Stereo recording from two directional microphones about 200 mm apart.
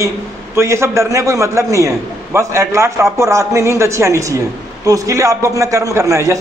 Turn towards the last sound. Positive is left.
turn(degrees=-15)  # may be behind; listen again after turning